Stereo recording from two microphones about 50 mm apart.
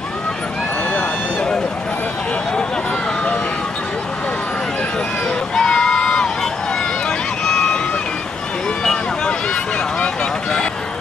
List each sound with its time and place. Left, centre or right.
5.6 s crowd: centre
7.1 s run: centre